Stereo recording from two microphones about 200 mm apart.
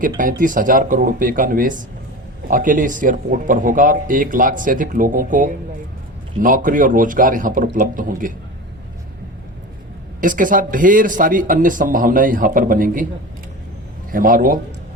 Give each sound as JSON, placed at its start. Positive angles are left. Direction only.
{"t": 0.2, "sound": "speech", "side_deg": -40}
{"t": 10.2, "sound": "speech", "side_deg": -40}
{"t": 14.1, "sound": "speech", "side_deg": -45}